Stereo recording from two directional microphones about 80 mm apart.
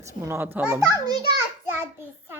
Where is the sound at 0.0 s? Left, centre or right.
Right.